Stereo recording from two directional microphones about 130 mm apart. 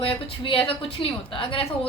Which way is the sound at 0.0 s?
45° left (ahead or behind).